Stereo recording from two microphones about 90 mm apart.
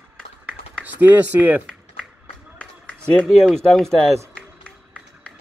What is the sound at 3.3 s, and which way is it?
A man's voice, 5° left (ahead or behind).